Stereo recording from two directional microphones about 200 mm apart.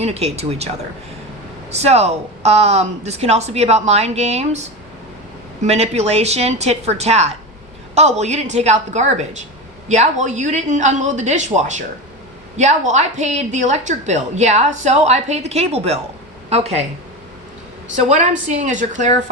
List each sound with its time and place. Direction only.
0.0 s a woman's voice: 30° right (ahead or behind)
1.7 s a woman's voice: 30° right (ahead or behind)
5.6 s a woman's voice: 30° right (ahead or behind)
17.9 s a woman's voice: 35° right (ahead or behind)